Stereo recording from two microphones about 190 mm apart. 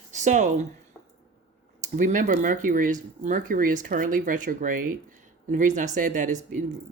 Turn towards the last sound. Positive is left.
turn(degrees=-40)  # may be behind; listen again after turning